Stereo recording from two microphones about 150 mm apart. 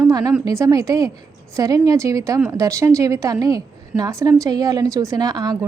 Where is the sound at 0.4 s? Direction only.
20° right (ahead or behind).